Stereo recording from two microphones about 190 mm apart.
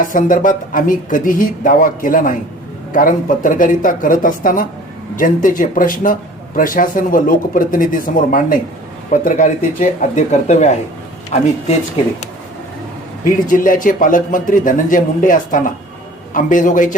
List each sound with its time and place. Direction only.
0.0 s speech: 45° left (ahead or behind)
13.5 s speech: 45° left (ahead or behind)